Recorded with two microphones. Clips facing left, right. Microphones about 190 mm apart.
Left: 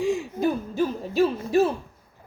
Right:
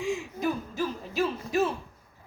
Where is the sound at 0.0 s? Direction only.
35° left (ahead or behind).